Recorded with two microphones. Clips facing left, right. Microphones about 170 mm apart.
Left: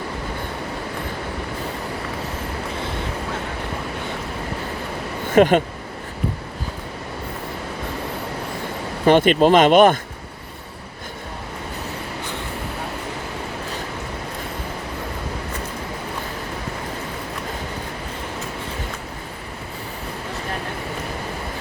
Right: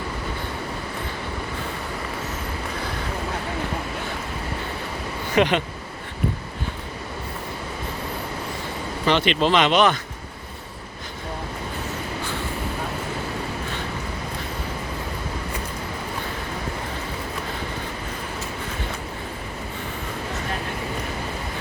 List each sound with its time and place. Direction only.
5.3 s speech: 45° left (ahead or behind)
9.0 s speech: 50° left (ahead or behind)